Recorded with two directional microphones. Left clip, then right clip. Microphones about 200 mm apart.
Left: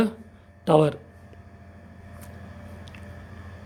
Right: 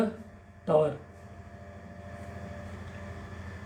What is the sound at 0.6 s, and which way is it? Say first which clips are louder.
Speech: left 5 dB; 60° left (ahead or behind).